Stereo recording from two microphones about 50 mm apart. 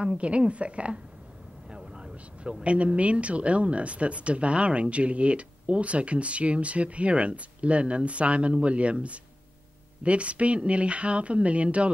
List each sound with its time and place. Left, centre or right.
0.0 s a man's voice: right